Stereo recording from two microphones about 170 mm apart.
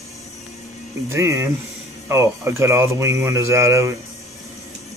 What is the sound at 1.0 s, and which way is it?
Speech, 15° right (ahead or behind).